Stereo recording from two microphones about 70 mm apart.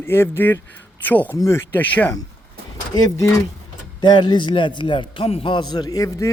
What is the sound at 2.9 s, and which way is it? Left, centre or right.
Speech, left.